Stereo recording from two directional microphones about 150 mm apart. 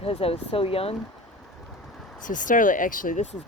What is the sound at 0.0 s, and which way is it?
Speech, 40° left (ahead or behind).